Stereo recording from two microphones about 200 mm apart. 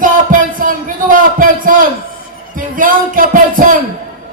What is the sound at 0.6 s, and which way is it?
Speech, 45° right (ahead or behind).